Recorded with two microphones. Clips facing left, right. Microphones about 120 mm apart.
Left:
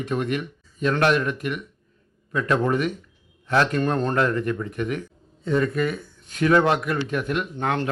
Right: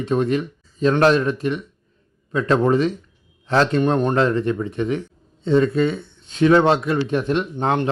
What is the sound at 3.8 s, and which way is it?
A man's voice, 15° right (ahead or behind).